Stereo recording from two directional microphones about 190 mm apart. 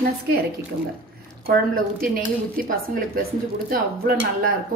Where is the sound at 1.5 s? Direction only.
50° right (ahead or behind).